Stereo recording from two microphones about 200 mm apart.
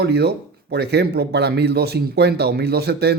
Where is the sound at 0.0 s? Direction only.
55° right (ahead or behind).